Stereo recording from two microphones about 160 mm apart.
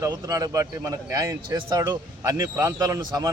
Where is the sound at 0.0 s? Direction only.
20° right (ahead or behind).